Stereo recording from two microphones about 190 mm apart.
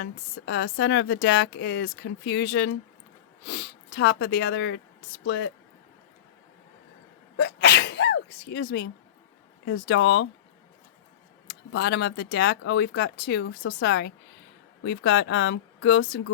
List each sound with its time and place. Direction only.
0.0 s speech: 65° left (ahead or behind)
7.3 s sneeze: 60° left (ahead or behind)
9.6 s speech: 70° left (ahead or behind)
11.4 s speech: 65° left (ahead or behind)